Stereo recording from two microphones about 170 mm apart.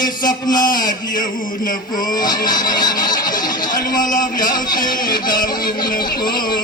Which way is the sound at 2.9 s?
55° left (ahead or behind).